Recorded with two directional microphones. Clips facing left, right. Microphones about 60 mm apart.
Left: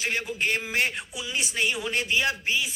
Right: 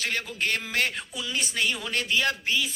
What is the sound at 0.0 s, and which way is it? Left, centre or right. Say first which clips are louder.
A man's voice: left 1 dB; centre.